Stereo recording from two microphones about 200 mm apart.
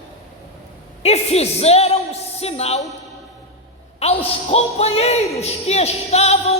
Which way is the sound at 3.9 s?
30° left (ahead or behind).